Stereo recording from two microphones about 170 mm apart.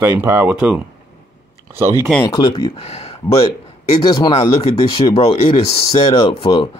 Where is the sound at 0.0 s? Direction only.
15° right (ahead or behind).